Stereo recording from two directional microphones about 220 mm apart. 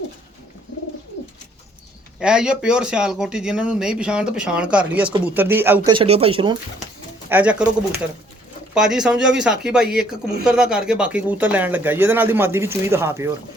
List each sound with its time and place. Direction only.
2.1 s speech: 5° right (ahead or behind)
5.9 s speech: 25° right (ahead or behind)
7.3 s speech: 5° right (ahead or behind)